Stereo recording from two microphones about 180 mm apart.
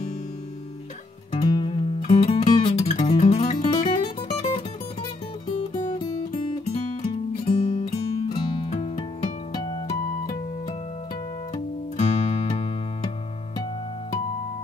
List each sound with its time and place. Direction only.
1.3 s music: 30° left (ahead or behind)
9.5 s music: 20° left (ahead or behind)
11.5 s music: 35° left (ahead or behind)